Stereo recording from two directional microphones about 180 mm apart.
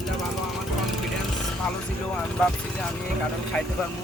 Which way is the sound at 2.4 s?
5° left (ahead or behind).